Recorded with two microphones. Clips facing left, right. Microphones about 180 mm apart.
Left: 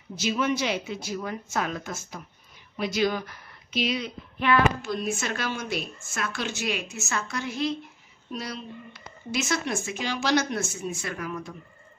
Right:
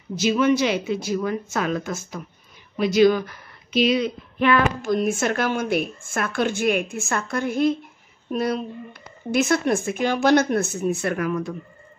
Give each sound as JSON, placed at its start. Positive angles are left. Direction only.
{"t": 0.2, "sound": "speech", "side_deg": -80}
{"t": 2.8, "sound": "a woman's voice", "side_deg": -90}